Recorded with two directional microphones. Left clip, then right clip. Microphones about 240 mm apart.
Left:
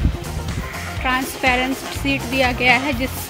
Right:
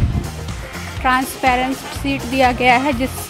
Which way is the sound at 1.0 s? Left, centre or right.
Centre.